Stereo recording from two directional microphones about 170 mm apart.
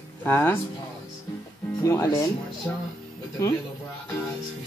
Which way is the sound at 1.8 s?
15° left (ahead or behind).